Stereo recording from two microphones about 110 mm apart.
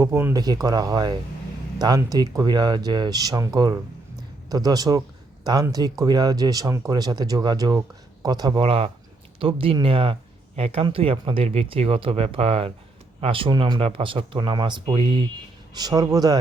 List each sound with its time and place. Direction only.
0.0 s speech: 25° right (ahead or behind)
0.3 s speech: 35° right (ahead or behind)
8.6 s speech: 55° right (ahead or behind)
15.7 s speech: 35° right (ahead or behind)